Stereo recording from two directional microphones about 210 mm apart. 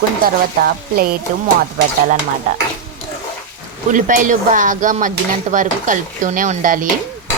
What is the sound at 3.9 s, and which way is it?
Speech, 40° right (ahead or behind).